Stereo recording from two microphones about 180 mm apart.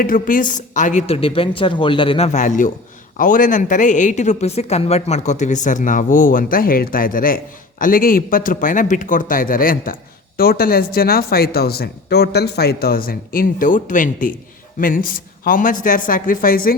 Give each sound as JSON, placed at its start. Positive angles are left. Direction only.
{"t": 0.0, "sound": "a woman's voice", "side_deg": 50}